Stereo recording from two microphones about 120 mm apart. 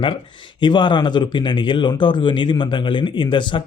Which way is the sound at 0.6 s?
40° left (ahead or behind).